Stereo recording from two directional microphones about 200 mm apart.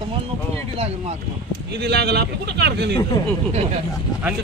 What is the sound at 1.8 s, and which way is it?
A man's voice, 55° right (ahead or behind).